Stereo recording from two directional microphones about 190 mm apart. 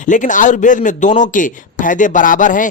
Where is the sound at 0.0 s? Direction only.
40° left (ahead or behind).